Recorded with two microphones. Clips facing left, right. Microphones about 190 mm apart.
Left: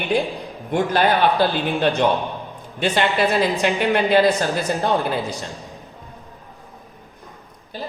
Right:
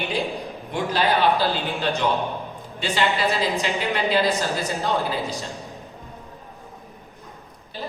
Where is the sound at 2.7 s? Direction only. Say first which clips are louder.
Left 4 dB; 60° left (ahead or behind).